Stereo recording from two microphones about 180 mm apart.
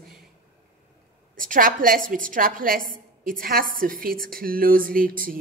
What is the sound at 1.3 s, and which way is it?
A woman's voice, 50° right (ahead or behind).